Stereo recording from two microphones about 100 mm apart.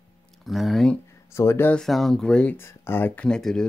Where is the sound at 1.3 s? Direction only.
25° left (ahead or behind).